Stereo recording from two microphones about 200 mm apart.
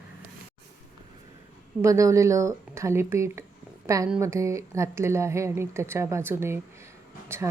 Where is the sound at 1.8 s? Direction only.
15° right (ahead or behind).